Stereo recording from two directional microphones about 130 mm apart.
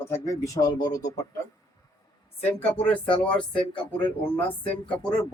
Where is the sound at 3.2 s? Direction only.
10° left (ahead or behind).